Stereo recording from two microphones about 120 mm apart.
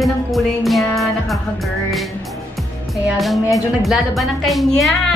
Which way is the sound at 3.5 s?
Centre (ahead or behind).